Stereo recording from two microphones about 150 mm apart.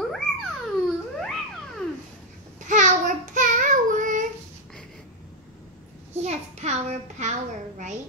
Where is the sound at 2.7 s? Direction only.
55° right (ahead or behind).